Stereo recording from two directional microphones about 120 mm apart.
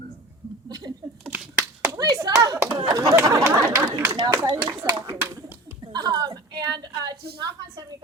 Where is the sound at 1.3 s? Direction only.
10° right (ahead or behind).